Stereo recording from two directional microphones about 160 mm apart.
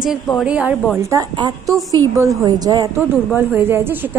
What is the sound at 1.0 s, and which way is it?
A woman's voice, 20° right (ahead or behind).